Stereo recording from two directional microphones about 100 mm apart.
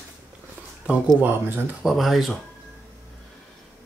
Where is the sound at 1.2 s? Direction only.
20° right (ahead or behind).